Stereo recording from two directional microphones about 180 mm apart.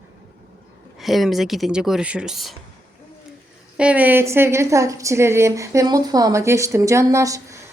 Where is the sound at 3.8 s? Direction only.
10° right (ahead or behind).